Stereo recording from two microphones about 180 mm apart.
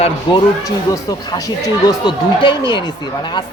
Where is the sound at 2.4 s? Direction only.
25° left (ahead or behind).